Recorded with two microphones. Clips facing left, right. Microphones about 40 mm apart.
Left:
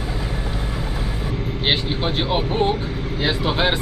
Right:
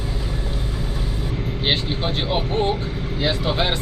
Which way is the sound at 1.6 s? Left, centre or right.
Centre.